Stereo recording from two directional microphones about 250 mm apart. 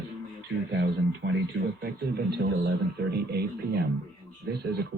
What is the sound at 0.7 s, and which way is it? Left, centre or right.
Speech, right.